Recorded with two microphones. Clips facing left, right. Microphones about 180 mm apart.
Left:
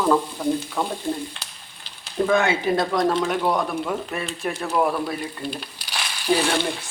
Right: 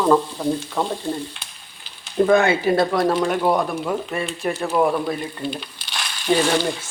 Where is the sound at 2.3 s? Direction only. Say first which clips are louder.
Right 4 dB; 55° right (ahead or behind).